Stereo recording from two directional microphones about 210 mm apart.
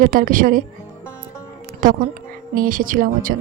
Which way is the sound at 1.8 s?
40° right (ahead or behind).